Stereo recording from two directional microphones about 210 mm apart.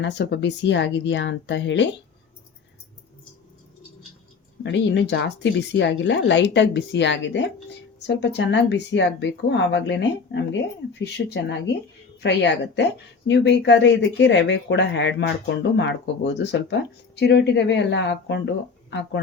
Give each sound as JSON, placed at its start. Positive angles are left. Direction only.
{"t": 0.0, "sound": "a woman's voice", "side_deg": 55}
{"t": 4.6, "sound": "a woman's voice", "side_deg": 60}